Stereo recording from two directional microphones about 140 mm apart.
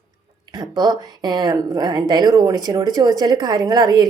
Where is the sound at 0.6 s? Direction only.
30° right (ahead or behind).